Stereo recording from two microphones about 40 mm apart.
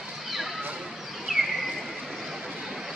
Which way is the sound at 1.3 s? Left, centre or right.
Centre.